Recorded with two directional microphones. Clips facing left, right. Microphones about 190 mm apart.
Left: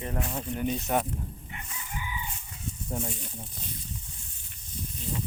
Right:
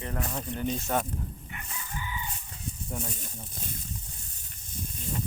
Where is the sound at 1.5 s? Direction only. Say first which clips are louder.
Left 1 dB; 15° left (ahead or behind).